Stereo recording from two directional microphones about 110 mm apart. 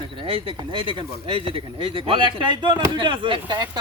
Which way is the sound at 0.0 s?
55° right (ahead or behind).